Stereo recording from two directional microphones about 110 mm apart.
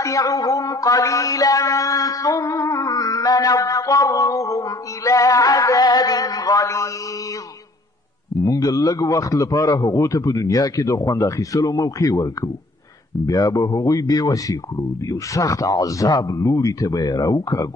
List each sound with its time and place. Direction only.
0.0 s mantra: 30° left (ahead or behind)
8.4 s speech: 35° left (ahead or behind)